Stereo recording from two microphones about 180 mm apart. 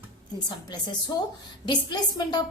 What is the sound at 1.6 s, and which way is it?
Speech, 25° left (ahead or behind).